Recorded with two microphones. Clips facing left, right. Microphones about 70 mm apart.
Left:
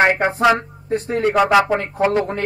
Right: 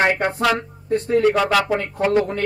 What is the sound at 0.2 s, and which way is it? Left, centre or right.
Speech, centre.